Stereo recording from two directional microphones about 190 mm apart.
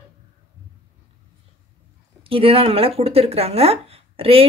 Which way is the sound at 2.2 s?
30° right (ahead or behind).